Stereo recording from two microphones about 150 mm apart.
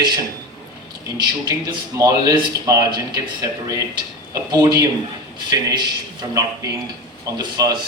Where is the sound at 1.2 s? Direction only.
25° right (ahead or behind).